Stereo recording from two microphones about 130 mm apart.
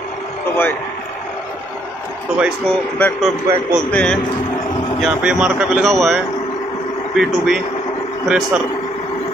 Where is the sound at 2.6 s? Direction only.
5° left (ahead or behind).